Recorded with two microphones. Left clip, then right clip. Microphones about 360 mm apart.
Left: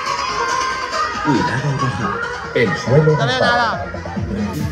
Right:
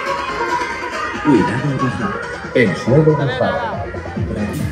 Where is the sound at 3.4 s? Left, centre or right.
Left.